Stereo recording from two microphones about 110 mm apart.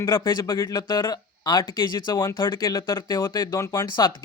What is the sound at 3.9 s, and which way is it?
Speech, 40° left (ahead or behind).